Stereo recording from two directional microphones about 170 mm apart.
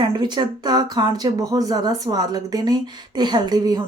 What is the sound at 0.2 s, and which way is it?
Speech, 25° right (ahead or behind).